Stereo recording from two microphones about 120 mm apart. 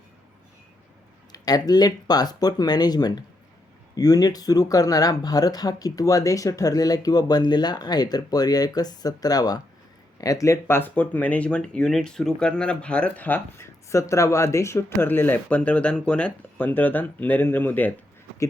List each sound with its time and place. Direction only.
1.3 s speech: 35° left (ahead or behind); by 17.9 s 15° left (ahead or behind)